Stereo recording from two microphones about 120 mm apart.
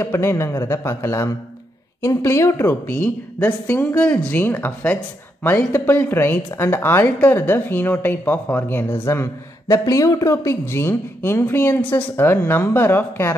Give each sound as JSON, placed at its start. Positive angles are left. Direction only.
{"t": 0.0, "sound": "a woman's voice", "side_deg": 20}